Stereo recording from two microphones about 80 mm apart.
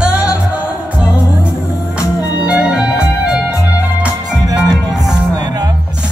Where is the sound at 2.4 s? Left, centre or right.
Centre.